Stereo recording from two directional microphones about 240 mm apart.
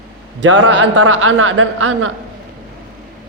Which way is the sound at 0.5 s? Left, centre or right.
Right.